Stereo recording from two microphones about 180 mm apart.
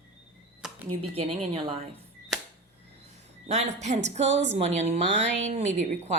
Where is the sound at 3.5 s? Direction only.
40° right (ahead or behind).